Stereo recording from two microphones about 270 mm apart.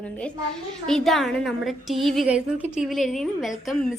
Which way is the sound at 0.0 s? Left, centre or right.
Centre.